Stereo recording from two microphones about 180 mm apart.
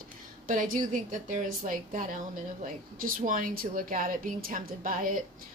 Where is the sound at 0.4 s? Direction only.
45° right (ahead or behind).